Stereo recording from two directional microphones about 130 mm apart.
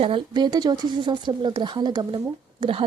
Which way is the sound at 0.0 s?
40° right (ahead or behind).